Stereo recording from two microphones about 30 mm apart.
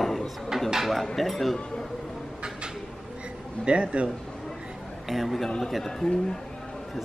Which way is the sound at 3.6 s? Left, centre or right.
Right.